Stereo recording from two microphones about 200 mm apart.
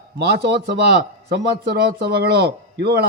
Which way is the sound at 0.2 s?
55° right (ahead or behind).